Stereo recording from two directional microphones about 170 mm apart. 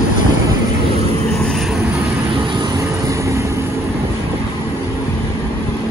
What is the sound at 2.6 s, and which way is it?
Vehicle, 20° right (ahead or behind).